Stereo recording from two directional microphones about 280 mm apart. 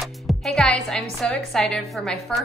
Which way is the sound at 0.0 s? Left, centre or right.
Centre.